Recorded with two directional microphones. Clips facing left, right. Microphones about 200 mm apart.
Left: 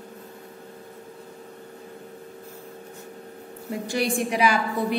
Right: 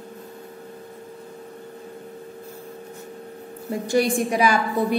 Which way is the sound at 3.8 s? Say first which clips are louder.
Right 5 dB; 45° right (ahead or behind).